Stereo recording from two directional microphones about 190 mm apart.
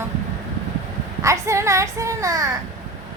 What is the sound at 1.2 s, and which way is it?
A child's voice, 15° right (ahead or behind).